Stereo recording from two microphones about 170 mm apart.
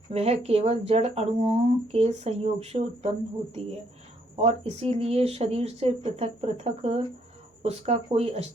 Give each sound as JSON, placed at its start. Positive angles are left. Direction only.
{"t": 0.1, "sound": "speech", "side_deg": -35}